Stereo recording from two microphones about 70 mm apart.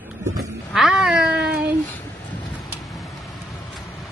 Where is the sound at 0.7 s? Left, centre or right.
Centre.